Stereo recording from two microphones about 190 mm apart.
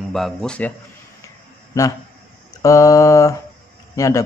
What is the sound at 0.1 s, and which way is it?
Speech, centre (ahead or behind).